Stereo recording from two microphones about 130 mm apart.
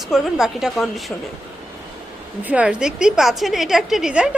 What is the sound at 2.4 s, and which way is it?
A woman's voice, 10° right (ahead or behind).